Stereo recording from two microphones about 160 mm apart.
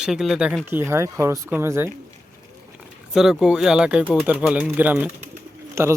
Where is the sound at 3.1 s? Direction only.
5° right (ahead or behind).